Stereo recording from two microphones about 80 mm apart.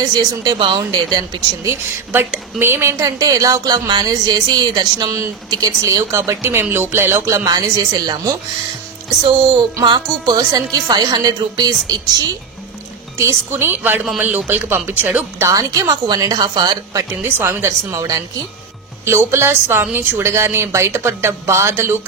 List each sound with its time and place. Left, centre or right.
0.0 s a woman's voice: right
2.6 s a woman's voice: right
3.0 s a woman's voice: right
5.5 s a woman's voice: right
7.4 s speech: right
10.2 s a woman's voice: right
13.2 s a woman's voice: right
15.5 s speech: right
17.1 s a woman's voice: right
19.0 s a woman's voice: right